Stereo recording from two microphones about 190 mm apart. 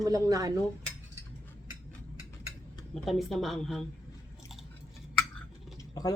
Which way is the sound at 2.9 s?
Centre (ahead or behind).